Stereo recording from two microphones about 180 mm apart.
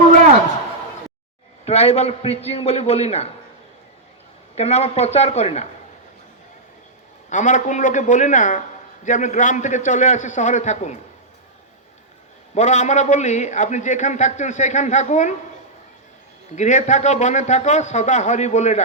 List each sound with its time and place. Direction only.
1.6 s a man's voice: 35° left (ahead or behind)
4.5 s a man's voice: 35° left (ahead or behind)
7.3 s a man's voice: 45° left (ahead or behind)
12.5 s a man's voice: 40° left (ahead or behind)
16.6 s a man's voice: 40° left (ahead or behind)